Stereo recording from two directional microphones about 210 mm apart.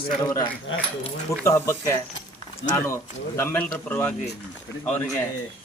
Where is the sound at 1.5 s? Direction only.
10° left (ahead or behind).